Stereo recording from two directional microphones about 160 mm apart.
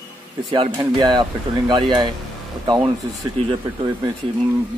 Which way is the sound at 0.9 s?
30° right (ahead or behind).